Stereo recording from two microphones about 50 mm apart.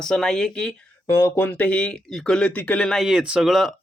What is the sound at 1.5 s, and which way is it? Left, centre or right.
Speech, left.